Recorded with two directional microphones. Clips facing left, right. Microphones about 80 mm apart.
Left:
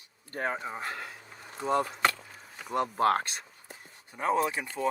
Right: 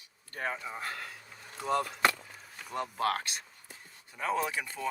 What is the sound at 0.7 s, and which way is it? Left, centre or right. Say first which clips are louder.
Speech: left 2 dB; left.